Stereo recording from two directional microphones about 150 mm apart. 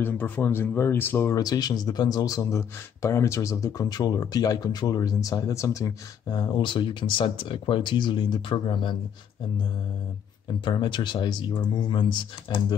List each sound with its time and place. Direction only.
0.0 s speech: 15° left (ahead or behind); by 8.9 s 30° left (ahead or behind)
10.6 s speech: 30° left (ahead or behind)